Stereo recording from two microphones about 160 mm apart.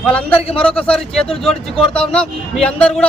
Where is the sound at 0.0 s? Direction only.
10° left (ahead or behind).